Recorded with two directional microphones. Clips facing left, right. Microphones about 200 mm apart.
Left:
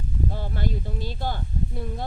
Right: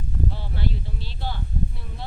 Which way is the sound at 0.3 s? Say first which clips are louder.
Left 2 dB; 45° left (ahead or behind).